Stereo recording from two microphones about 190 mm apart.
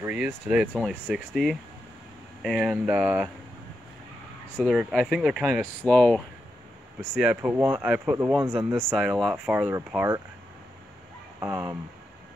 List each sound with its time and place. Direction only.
0.0 s speech: 5° right (ahead or behind)
4.6 s speech: centre (ahead or behind)
7.0 s speech: 5° right (ahead or behind)
8.9 s speech: centre (ahead or behind)
11.3 s speech: 15° right (ahead or behind)